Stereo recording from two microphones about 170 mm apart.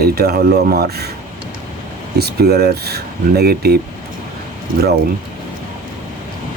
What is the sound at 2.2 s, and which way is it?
Speech, 70° right (ahead or behind).